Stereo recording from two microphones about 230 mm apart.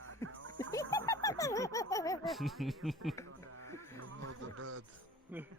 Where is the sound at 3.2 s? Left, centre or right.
Right.